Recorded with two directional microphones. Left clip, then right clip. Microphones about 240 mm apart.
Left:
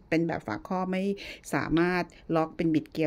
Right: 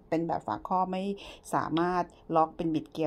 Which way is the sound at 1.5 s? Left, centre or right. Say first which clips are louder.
Left 1 dB; left.